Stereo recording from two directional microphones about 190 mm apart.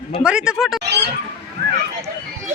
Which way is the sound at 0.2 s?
5° right (ahead or behind).